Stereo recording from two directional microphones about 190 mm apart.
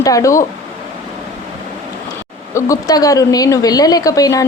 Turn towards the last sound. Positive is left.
turn(degrees=20)  # may be behind; listen again after turning